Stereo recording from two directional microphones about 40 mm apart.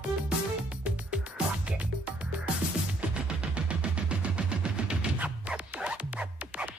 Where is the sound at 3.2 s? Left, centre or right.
Right.